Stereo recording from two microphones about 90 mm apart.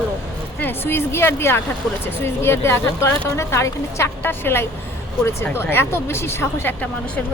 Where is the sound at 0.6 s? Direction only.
25° left (ahead or behind).